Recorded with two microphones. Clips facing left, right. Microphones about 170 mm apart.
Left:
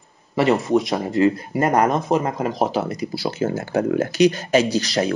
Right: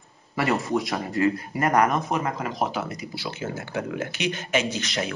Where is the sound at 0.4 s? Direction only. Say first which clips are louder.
Left 7 dB; 25° left (ahead or behind).